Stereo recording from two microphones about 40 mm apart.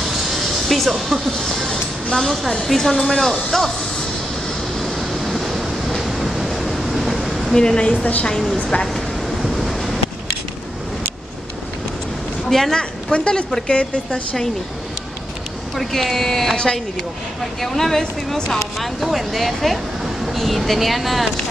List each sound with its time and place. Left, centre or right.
0.0 s music: centre
0.9 s speech: centre
4.7 s waves: centre
7.5 s a woman's voice: left
8.0 s speech: left
8.3 s speech: centre
8.8 s vehicle: centre
12.4 s speech: centre
13.1 s a woman's voice: left
15.7 s speech: centre
17.6 s speech: centre